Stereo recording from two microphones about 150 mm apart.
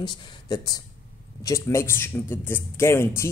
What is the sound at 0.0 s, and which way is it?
Speech, 30° left (ahead or behind).